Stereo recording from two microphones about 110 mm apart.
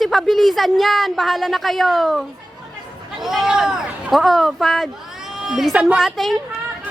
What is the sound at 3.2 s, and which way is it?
A woman's voice, 5° right (ahead or behind).